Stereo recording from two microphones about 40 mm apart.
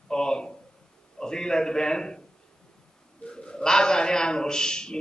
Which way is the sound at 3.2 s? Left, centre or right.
Left.